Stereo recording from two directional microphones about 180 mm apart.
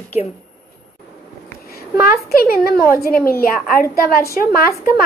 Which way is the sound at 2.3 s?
55° left (ahead or behind).